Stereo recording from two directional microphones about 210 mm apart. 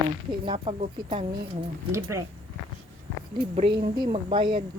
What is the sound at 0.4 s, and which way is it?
Speech, 25° right (ahead or behind).